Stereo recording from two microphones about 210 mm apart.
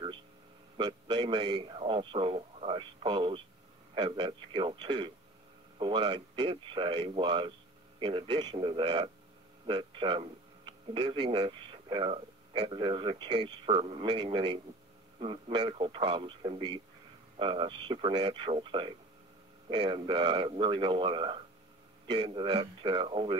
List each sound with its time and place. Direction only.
0.7 s speech: 20° right (ahead or behind)